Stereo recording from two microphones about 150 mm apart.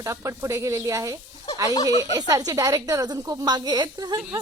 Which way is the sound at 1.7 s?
30° left (ahead or behind).